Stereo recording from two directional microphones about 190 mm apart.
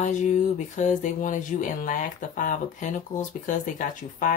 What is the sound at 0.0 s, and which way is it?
Speech, 40° left (ahead or behind).